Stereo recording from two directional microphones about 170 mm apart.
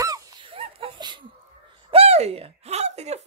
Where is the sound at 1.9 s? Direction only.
35° right (ahead or behind).